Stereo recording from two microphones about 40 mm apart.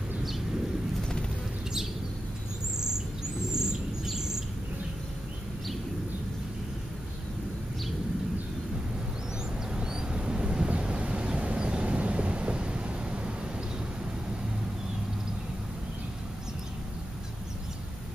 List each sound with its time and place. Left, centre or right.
3.5 s bird: centre
9.8 s vehicle: right